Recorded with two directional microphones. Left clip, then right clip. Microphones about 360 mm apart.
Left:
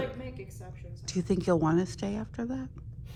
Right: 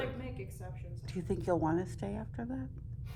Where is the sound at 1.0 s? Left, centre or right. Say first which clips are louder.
Left 7 dB; centre.